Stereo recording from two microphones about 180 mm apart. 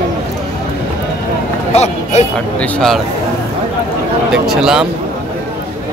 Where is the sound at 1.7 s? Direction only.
40° left (ahead or behind).